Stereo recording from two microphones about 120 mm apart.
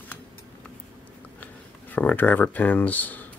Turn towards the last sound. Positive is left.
turn(degrees=15)  # may be behind; listen again after turning